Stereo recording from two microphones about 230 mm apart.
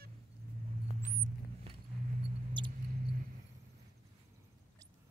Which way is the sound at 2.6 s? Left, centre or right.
Centre.